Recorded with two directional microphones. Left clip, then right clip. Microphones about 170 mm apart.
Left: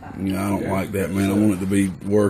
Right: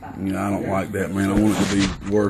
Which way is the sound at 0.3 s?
20° left (ahead or behind).